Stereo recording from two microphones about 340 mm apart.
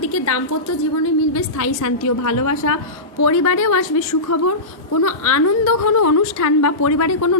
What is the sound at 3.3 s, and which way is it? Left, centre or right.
Speech, left.